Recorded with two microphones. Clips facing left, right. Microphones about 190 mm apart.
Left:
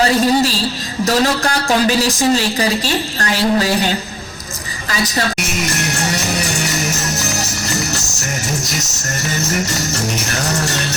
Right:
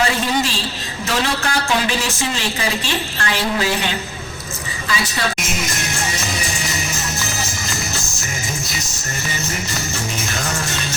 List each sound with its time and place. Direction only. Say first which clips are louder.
0.0 s speech: left 6 dB; 40° left (ahead or behind)
6.1 s music: left 5 dB; 65° left (ahead or behind)